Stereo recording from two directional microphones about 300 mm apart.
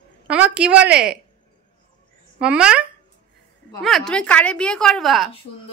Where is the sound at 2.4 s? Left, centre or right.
Centre.